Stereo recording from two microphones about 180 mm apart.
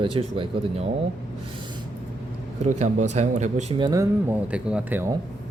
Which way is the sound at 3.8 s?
20° right (ahead or behind).